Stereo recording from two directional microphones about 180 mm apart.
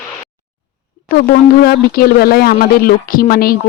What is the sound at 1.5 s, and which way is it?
Speech, 60° left (ahead or behind).